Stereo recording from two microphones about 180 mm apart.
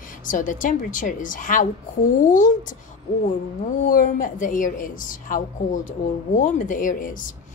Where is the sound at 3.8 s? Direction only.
45° left (ahead or behind).